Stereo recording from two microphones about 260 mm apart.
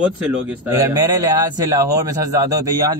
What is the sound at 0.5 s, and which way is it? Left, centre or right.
A man's voice, centre.